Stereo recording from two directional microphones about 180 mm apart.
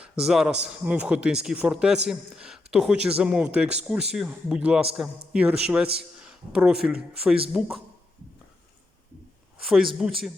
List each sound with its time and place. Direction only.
0.0 s a man's voice: 5° right (ahead or behind)
9.6 s speech: centre (ahead or behind)